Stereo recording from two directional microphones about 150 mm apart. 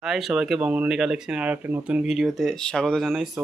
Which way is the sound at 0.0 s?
Centre (ahead or behind).